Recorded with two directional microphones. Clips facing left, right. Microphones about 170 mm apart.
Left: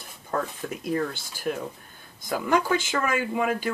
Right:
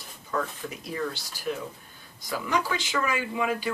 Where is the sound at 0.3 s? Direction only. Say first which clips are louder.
Left 2 dB; 50° left (ahead or behind).